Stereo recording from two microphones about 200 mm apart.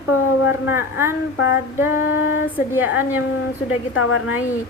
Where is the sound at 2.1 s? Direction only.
80° left.